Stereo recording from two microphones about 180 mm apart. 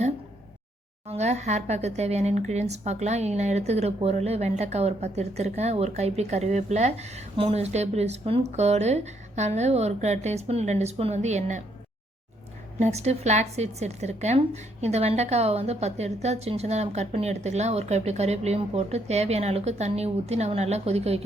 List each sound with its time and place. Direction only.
1.0 s speech: 35° right (ahead or behind)
12.8 s speech: 35° right (ahead or behind)